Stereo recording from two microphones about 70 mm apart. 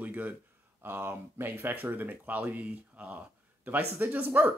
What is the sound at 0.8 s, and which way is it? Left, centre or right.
Speech, right.